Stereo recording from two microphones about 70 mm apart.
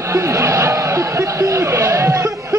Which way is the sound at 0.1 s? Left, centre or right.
Right.